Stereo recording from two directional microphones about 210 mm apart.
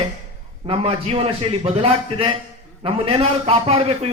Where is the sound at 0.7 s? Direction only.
25° right (ahead or behind).